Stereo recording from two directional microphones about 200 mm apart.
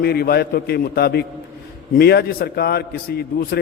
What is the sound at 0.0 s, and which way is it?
A man's voice, 50° left (ahead or behind).